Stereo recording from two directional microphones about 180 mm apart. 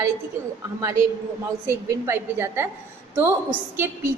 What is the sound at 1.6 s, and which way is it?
A woman's voice, 15° right (ahead or behind).